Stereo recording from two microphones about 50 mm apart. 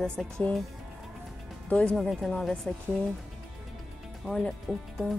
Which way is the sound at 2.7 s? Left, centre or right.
Left.